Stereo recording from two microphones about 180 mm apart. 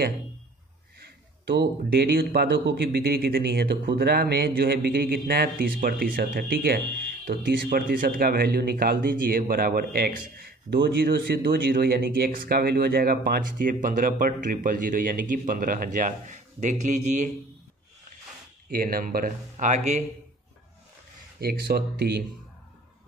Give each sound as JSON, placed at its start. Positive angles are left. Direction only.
{"t": 0.9, "sound": "speech", "side_deg": -70}
{"t": 18.7, "sound": "speech", "side_deg": -55}
{"t": 19.5, "sound": "speech", "side_deg": -40}
{"t": 21.4, "sound": "speech", "side_deg": -60}